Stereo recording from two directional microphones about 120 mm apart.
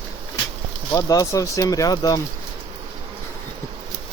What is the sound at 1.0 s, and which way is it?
Speech, 30° left (ahead or behind).